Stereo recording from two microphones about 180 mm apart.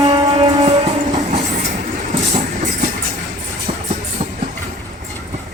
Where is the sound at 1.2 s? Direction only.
40° right (ahead or behind).